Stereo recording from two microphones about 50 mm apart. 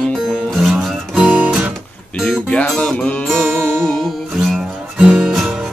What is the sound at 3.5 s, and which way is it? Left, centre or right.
Music, right.